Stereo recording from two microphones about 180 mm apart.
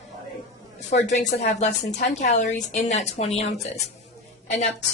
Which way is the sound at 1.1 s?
40° left (ahead or behind).